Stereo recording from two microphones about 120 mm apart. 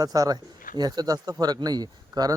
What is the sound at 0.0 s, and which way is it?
A man's voice, 30° right (ahead or behind).